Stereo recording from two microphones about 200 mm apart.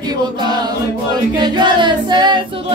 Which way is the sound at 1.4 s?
25° right (ahead or behind).